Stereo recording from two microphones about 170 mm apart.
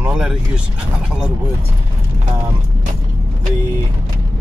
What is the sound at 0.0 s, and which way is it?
Vehicle, 5° right (ahead or behind).